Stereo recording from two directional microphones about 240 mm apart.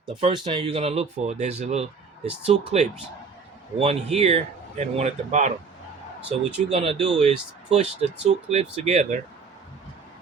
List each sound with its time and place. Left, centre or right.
0.2 s speech: right